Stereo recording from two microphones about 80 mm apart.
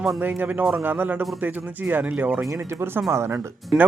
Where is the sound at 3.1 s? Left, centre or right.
Right.